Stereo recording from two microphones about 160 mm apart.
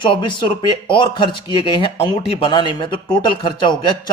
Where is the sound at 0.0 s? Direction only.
30° left (ahead or behind).